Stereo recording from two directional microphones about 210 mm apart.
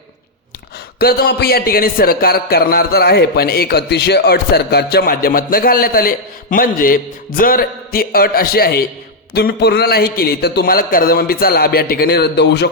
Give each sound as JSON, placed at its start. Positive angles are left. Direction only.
{"t": 0.9, "sound": "speech", "side_deg": 50}